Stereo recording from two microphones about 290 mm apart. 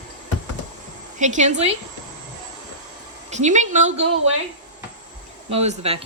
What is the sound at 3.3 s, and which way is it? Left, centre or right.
Speech, right.